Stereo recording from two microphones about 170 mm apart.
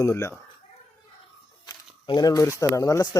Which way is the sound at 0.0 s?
15° left (ahead or behind).